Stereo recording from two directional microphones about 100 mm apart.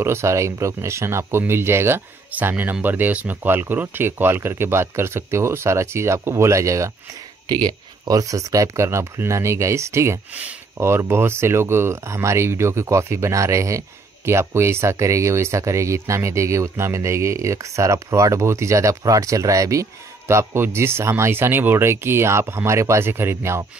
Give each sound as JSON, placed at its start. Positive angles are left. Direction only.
{"t": 0.0, "sound": "speech", "side_deg": -25}
{"t": 7.6, "sound": "speech", "side_deg": -40}